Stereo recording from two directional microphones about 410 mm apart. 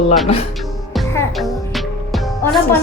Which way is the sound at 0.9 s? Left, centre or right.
Centre.